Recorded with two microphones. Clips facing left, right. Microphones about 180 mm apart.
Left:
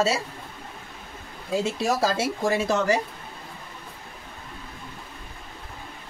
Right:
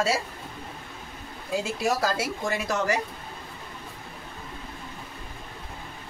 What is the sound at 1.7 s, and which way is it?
Speech, 25° left (ahead or behind).